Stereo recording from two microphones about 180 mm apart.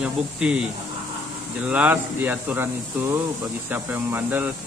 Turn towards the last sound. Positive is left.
turn(degrees=-10)  # may be behind; listen again after turning